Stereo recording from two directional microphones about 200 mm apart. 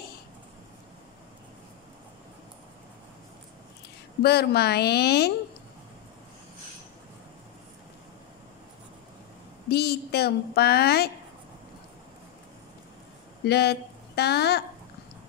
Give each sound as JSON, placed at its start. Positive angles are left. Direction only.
{"t": 4.2, "sound": "a woman's voice", "side_deg": 55}
{"t": 9.7, "sound": "a woman's voice", "side_deg": 50}
{"t": 13.4, "sound": "speech", "side_deg": 55}